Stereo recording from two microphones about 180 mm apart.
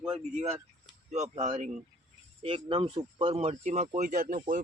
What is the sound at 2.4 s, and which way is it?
Speech, 30° right (ahead or behind).